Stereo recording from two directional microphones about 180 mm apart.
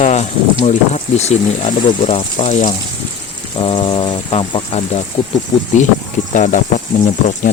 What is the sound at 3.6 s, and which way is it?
Speech, 30° left (ahead or behind).